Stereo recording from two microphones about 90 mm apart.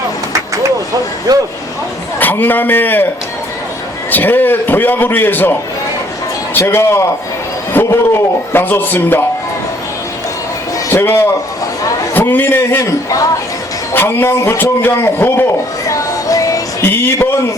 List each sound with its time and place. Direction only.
1.3 s speech: 45° right (ahead or behind)
2.1 s a man's voice: 20° left (ahead or behind)
4.1 s a man's voice: 20° left (ahead or behind)
6.6 s a man's voice: 30° left (ahead or behind)
10.8 s a man's voice: 30° left (ahead or behind)
12.8 s a man's voice: 40° left (ahead or behind)
13.9 s a man's voice: 25° left (ahead or behind)
15.9 s music: 40° left (ahead or behind)
16.8 s a man's voice: 25° left (ahead or behind)